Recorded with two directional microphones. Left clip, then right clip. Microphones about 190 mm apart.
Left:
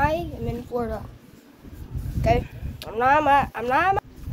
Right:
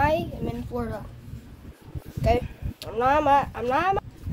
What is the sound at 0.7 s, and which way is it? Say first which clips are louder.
Speech: left 5 dB; 35° right (ahead or behind).